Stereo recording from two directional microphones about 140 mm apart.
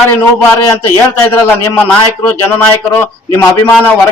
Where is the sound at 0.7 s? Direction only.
20° left (ahead or behind).